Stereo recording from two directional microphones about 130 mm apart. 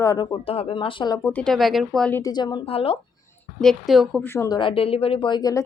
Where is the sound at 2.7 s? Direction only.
45° left (ahead or behind).